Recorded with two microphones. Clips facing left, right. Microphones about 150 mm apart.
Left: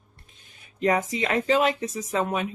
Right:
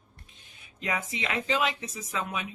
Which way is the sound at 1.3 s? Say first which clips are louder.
Left 6 dB; 45° left (ahead or behind).